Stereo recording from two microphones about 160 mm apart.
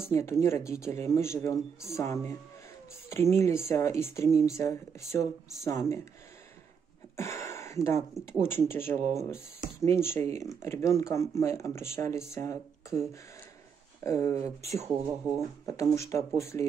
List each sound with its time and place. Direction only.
0.0 s speech: 15° left (ahead or behind)
4.3 s speech: 45° right (ahead or behind)
4.6 s speech: 15° left (ahead or behind)
7.2 s speech: 20° left (ahead or behind)
14.0 s speech: 15° left (ahead or behind)
14.3 s speech: 40° right (ahead or behind)
15.6 s speech: 20° left (ahead or behind)